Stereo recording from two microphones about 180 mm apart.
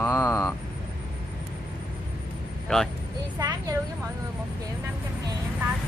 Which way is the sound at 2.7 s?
5° left (ahead or behind).